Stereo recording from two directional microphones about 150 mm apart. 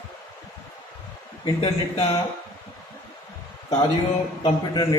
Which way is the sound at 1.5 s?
30° left (ahead or behind).